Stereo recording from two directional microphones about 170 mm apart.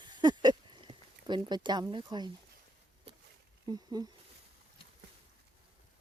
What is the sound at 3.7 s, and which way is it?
Speech, 25° right (ahead or behind).